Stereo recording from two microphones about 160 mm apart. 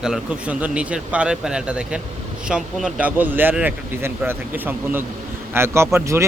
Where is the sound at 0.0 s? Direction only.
5° right (ahead or behind).